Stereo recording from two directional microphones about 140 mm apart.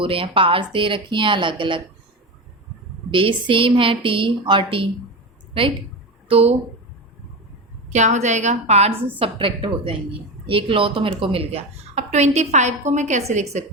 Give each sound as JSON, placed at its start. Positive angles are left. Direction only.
{"t": 0.0, "sound": "speech", "side_deg": -40}
{"t": 3.1, "sound": "speech", "side_deg": -35}
{"t": 6.2, "sound": "speech", "side_deg": -45}
{"t": 7.9, "sound": "a woman's voice", "side_deg": -55}
{"t": 9.1, "sound": "a woman's voice", "side_deg": -40}